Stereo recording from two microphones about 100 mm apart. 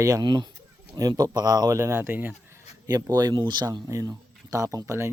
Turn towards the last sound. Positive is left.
turn(degrees=-30)  # may be behind; listen again after turning